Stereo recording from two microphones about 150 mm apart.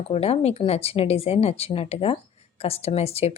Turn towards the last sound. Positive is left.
turn(degrees=45)  # may be behind; listen again after turning